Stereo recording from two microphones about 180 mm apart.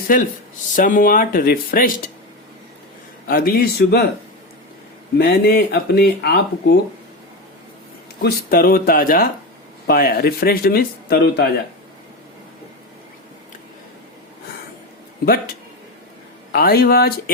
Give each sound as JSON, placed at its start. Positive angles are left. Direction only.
{"t": 0.1, "sound": "speech", "side_deg": 50}
{"t": 3.2, "sound": "speech", "side_deg": 55}
{"t": 5.1, "sound": "speech", "side_deg": 60}
{"t": 8.2, "sound": "speech", "side_deg": 60}
{"t": 16.5, "sound": "speech", "side_deg": 55}